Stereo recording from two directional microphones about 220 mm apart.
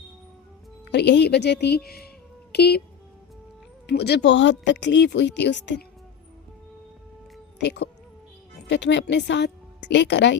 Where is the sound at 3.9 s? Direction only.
50° left (ahead or behind).